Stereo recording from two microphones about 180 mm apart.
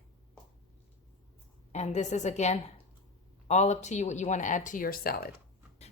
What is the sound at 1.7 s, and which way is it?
A woman's voice, 40° left (ahead or behind).